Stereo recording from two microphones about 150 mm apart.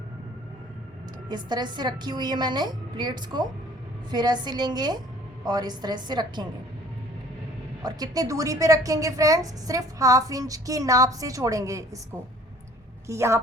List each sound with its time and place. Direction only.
1.3 s a woman's voice: 30° right (ahead or behind)
7.8 s a woman's voice: 25° right (ahead or behind)